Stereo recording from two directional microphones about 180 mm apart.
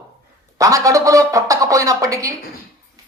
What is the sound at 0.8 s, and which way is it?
Speech, 15° right (ahead or behind).